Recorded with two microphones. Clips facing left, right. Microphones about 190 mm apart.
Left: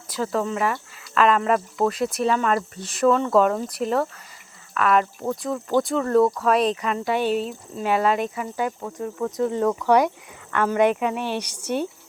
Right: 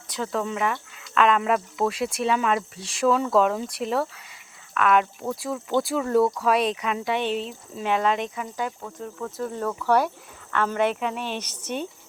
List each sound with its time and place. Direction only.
0.1 s speech: centre (ahead or behind)
9.1 s speech: 20° left (ahead or behind)